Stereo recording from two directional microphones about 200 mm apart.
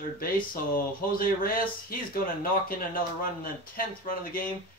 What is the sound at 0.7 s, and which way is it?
Speech, 45° left (ahead or behind).